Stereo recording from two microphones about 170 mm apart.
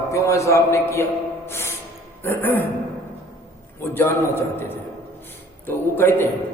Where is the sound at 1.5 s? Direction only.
15° left (ahead or behind).